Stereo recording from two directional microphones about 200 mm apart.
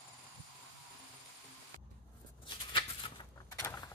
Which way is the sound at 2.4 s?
25° left (ahead or behind).